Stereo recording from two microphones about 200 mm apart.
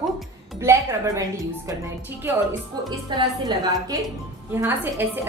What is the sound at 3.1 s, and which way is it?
Speech, 20° right (ahead or behind).